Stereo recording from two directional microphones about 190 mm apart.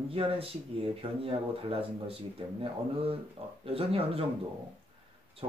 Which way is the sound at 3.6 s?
30° right (ahead or behind).